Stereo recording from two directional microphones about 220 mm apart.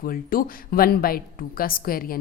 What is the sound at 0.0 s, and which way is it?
A woman's voice, 40° left (ahead or behind).